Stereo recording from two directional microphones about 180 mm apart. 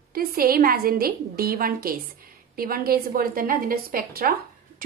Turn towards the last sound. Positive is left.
turn(degrees=-55)  # may be behind; listen again after turning